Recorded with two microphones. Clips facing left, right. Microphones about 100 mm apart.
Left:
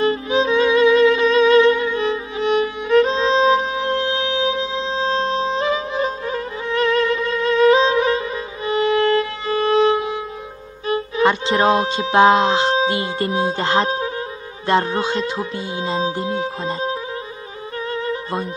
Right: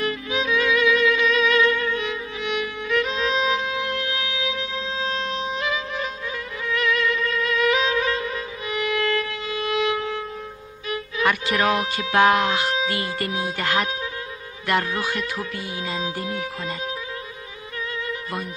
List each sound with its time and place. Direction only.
0.0 s violin: 30° left (ahead or behind)
10.9 s speech: 30° left (ahead or behind)
17.9 s music: 30° left (ahead or behind)